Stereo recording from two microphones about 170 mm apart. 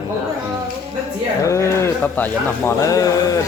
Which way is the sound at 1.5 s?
15° left (ahead or behind).